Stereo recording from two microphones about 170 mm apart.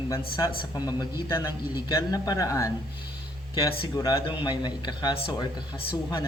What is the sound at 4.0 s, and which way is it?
A man's voice, 25° left (ahead or behind).